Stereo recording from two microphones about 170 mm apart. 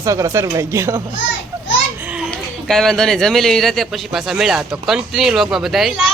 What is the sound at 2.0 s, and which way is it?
Children playing, 5° right (ahead or behind).